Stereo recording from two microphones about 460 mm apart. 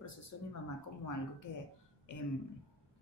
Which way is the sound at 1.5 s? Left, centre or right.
Left.